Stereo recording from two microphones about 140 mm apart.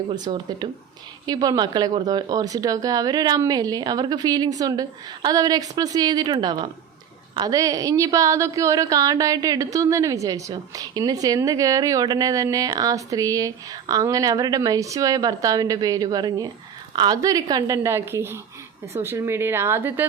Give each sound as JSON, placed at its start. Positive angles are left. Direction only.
{"t": 0.1, "sound": "a woman's voice", "side_deg": -35}